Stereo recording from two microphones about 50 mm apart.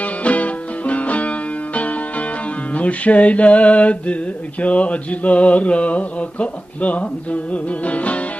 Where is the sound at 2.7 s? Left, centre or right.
Left.